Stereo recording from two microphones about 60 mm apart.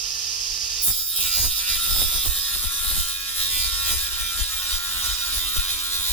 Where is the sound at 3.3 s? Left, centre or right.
Left.